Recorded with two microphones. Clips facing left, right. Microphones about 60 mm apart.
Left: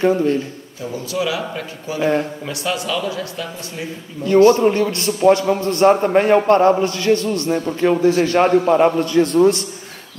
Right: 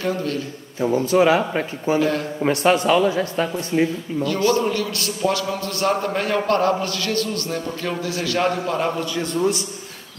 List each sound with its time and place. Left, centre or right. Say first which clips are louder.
0.0 s a man's voice: left 8 dB; left
0.7 s speech: right 7 dB; right
2.0 s a man's voice: left 4 dB; left
2.4 s speech: right 6 dB; right
4.2 s a man's voice: left 8 dB; left
9.1 s a man's voice: left 9 dB; left